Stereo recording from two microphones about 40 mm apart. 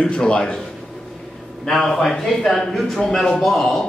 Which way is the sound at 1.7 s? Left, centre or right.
Centre.